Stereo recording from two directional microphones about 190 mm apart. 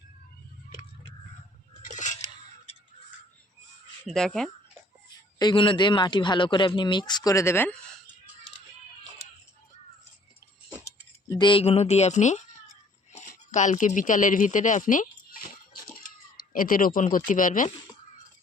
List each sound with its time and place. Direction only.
4.1 s speech: centre (ahead or behind)
5.4 s a man's voice: 25° left (ahead or behind)
11.3 s speech: 25° left (ahead or behind); by 15.4 s 45° left (ahead or behind)
16.4 s speech: 45° left (ahead or behind)